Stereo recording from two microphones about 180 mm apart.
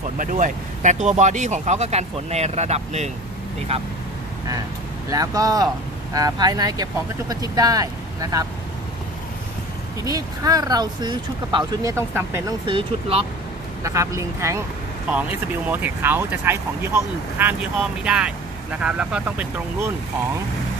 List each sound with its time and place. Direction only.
0.2 s speech: 45° right (ahead or behind)
5.1 s speech: 20° right (ahead or behind)
10.0 s speech: 20° right (ahead or behind)
12.6 s speech: 30° right (ahead or behind)
13.8 s speech: 15° right (ahead or behind)